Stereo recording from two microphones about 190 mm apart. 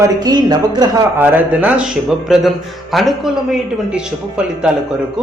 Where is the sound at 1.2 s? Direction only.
10° right (ahead or behind).